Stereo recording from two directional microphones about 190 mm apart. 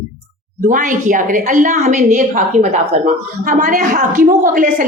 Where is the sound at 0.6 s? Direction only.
45° right (ahead or behind).